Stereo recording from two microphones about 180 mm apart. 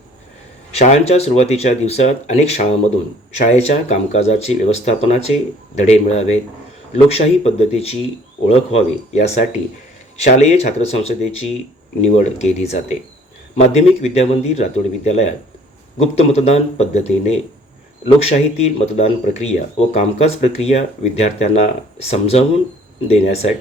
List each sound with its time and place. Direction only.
0.7 s speech: 35° left (ahead or behind)